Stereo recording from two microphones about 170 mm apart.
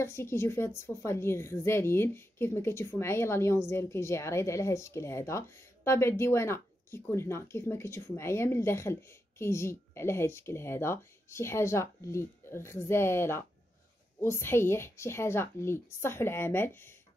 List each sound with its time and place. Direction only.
0.0 s a woman's voice: 15° left (ahead or behind)